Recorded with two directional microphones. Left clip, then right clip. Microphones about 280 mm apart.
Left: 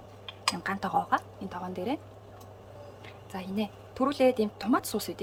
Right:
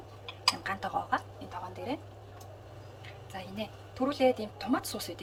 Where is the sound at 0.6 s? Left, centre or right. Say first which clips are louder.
Left 4 dB; left.